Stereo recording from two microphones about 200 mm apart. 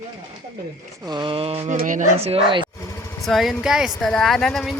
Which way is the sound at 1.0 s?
25° right (ahead or behind).